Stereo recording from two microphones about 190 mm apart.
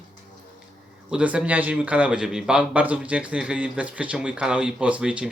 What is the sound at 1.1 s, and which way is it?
A man's voice, 5° right (ahead or behind).